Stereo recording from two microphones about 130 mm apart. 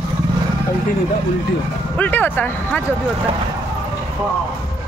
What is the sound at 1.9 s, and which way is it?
Speech, 15° left (ahead or behind).